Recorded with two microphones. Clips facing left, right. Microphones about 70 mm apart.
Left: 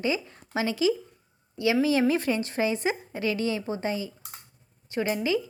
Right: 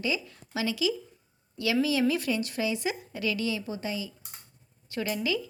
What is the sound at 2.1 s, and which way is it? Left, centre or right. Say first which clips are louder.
A woman's voice: left 3 dB; left.